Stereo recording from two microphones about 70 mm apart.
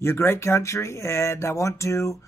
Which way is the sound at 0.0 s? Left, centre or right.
Left.